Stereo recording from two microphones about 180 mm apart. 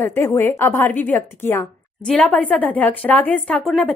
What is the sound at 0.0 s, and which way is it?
A woman's voice, 15° left (ahead or behind).